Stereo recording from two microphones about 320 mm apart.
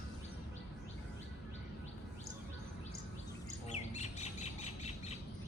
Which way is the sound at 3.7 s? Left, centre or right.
Left.